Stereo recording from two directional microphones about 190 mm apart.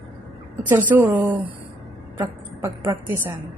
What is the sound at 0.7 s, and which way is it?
A woman's voice, 10° right (ahead or behind).